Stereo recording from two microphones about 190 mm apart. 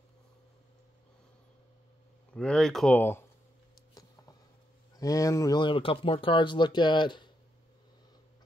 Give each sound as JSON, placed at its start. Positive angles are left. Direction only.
{"t": 2.3, "sound": "speech", "side_deg": 5}
{"t": 4.0, "sound": "a sound", "side_deg": 20}
{"t": 4.9, "sound": "speech", "side_deg": 20}